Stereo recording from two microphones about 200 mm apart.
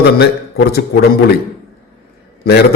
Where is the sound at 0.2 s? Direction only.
55° left (ahead or behind).